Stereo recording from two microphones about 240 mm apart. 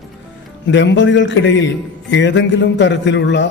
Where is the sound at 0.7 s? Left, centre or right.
Left.